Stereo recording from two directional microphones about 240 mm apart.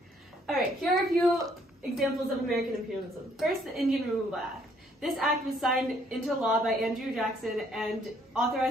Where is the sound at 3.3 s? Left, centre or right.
Centre.